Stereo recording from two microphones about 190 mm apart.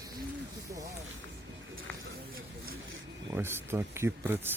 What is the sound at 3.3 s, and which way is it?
Speech, 10° right (ahead or behind).